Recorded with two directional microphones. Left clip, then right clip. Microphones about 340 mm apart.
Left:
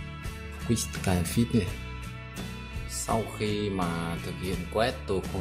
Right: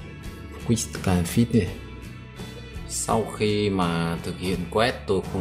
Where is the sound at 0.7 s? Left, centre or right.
Centre.